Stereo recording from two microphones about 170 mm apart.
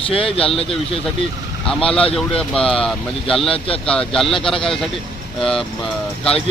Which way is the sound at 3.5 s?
35° left (ahead or behind).